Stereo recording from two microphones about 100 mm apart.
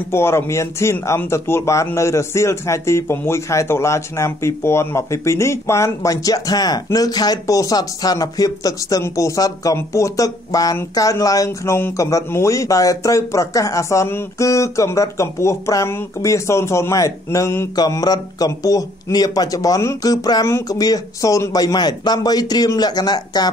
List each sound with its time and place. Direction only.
0.1 s a man's voice: 25° left (ahead or behind)
17.7 s speech: 40° left (ahead or behind)